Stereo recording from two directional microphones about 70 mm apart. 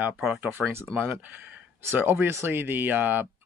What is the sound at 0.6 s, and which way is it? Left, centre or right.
Speech, right.